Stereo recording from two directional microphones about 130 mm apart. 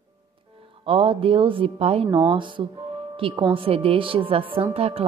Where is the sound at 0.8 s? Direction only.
45° right (ahead or behind).